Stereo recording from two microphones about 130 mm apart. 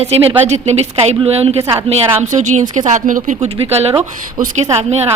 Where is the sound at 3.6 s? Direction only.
50° right (ahead or behind).